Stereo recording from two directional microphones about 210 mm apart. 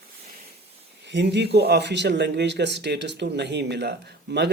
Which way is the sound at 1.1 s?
55° right (ahead or behind).